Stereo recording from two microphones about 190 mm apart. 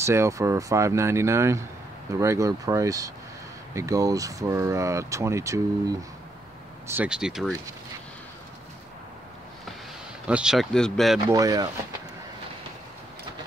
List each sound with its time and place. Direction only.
0.0 s speech: 15° right (ahead or behind)
10.2 s speech: 5° right (ahead or behind)
11.2 s speech: 20° right (ahead or behind)